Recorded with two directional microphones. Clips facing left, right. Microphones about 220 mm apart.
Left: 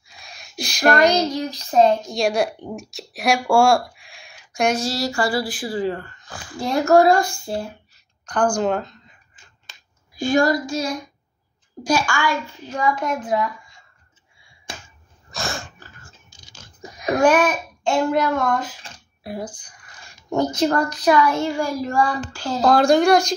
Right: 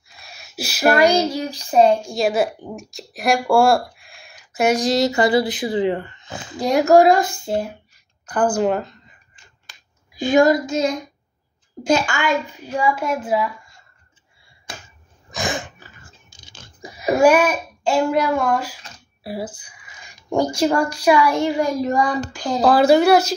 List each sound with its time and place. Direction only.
0.2 s a woman's voice: 5° right (ahead or behind); by 8.0 s 20° right (ahead or behind)
8.3 s a woman's voice: 5° right (ahead or behind)
9.7 s a sound: 25° left (ahead or behind)
10.1 s child singing: 20° right (ahead or behind)
11.8 s a woman's voice: 20° right (ahead or behind); by 13.8 s centre (ahead or behind)
15.3 s a sound: 15° right (ahead or behind)
16.9 s a child's voice: 5° right (ahead or behind)
22.6 s speech: 5° right (ahead or behind)